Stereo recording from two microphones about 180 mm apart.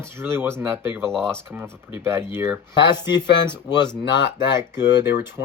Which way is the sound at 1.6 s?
15° right (ahead or behind).